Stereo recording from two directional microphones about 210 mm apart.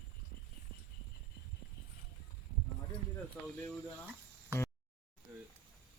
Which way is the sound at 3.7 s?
10° right (ahead or behind).